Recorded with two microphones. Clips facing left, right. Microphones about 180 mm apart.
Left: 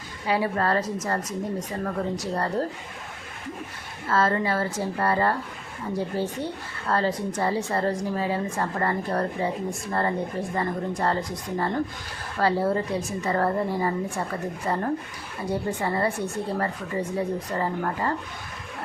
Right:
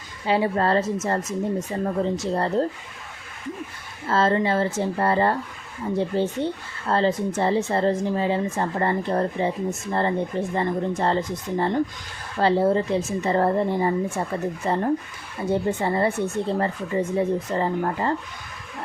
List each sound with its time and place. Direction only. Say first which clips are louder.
0.3 s speech: right 3 dB; 25° right (ahead or behind)
4.1 s speech: right 3 dB; 25° right (ahead or behind)